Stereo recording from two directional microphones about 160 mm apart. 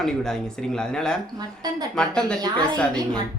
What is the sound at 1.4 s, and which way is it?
Speech, 25° right (ahead or behind).